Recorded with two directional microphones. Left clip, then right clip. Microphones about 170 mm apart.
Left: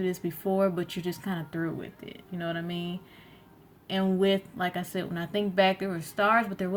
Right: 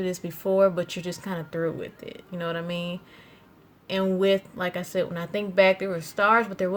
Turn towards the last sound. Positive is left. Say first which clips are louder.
# right 4 dB
turn(degrees=-45)  # may be behind; listen again after turning